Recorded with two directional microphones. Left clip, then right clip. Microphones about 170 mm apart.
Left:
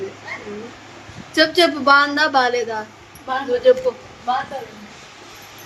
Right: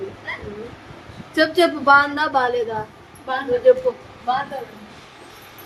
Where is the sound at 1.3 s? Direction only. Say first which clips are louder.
Left 2 dB; 15° left (ahead or behind).